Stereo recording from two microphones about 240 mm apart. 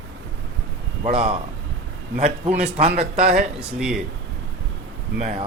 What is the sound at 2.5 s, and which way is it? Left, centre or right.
Speech, right.